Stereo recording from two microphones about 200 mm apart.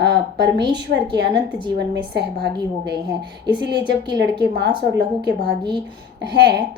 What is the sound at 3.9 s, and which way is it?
A woman's voice, 55° right (ahead or behind).